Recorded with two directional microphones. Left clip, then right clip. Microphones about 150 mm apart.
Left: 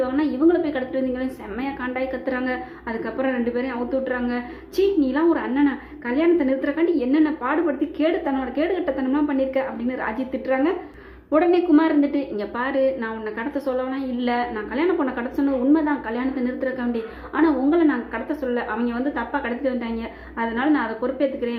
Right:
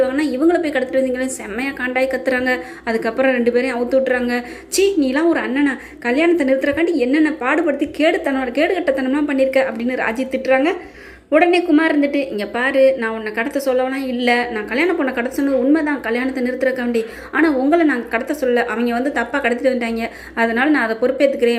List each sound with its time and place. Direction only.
0.0 s a woman's voice: 15° right (ahead or behind)